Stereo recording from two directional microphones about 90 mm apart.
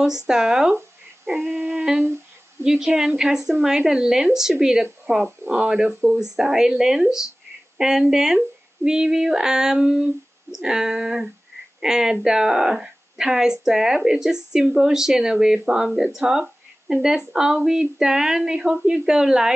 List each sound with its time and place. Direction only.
0.0 s a woman's voice: 5° right (ahead or behind)
1.3 s female singing: 20° right (ahead or behind)
2.6 s a woman's voice: 5° right (ahead or behind)
5.2 s a woman's voice: 20° right (ahead or behind)
7.7 s a sound: 5° right (ahead or behind)
8.1 s a woman's voice: 5° right (ahead or behind)